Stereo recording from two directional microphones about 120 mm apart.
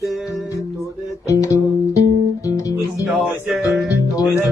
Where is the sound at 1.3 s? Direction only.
25° left (ahead or behind).